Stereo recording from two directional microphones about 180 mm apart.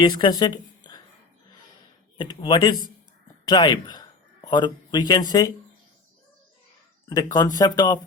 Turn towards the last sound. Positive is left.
turn(degrees=20)  # may be behind; listen again after turning